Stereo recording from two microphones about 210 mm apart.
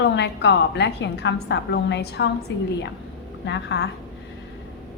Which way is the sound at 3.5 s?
55° left (ahead or behind).